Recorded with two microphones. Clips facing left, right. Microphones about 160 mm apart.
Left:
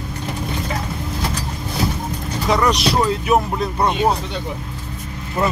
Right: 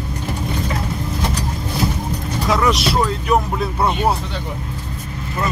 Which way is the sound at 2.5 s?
Centre (ahead or behind).